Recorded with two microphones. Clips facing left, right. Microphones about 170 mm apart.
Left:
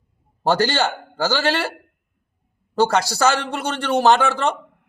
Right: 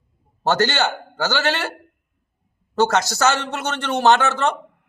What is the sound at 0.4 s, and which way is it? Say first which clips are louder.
A man's voice: left 1 dB; 35° left (ahead or behind).